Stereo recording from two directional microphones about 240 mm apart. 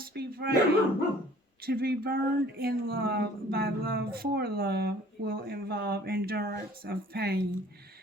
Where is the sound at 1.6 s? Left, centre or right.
Right.